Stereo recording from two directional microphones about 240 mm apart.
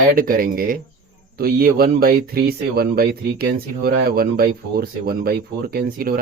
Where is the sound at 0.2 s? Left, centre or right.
Right.